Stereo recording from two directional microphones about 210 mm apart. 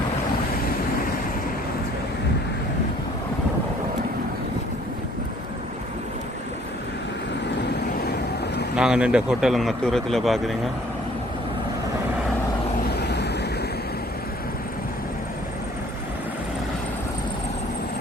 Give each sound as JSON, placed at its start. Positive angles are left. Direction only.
{"t": 8.7, "sound": "speech", "side_deg": -5}
{"t": 13.0, "sound": "vehicle", "side_deg": 50}